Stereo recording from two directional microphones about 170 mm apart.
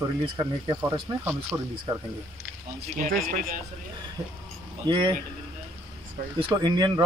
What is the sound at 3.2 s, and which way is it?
Speech, 55° right (ahead or behind).